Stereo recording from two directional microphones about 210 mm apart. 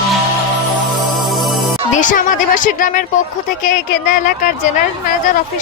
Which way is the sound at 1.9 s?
35° left (ahead or behind).